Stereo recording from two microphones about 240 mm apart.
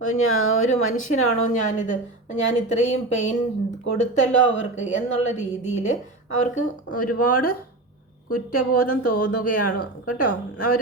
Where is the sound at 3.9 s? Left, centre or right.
Left.